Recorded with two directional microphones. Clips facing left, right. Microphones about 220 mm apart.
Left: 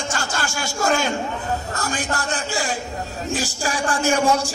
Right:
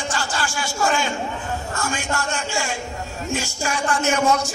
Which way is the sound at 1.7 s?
35° left (ahead or behind).